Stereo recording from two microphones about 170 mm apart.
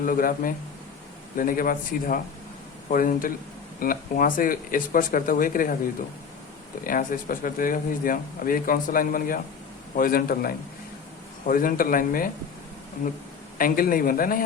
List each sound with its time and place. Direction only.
0.0 s speech: 55° left (ahead or behind)
6.8 s speech: 55° left (ahead or behind)
13.6 s speech: 55° left (ahead or behind)